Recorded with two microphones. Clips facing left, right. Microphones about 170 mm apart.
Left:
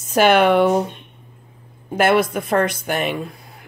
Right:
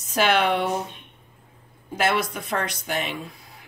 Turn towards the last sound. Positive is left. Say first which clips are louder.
# left 6 dB
turn(degrees=55)  # may be behind; listen again after turning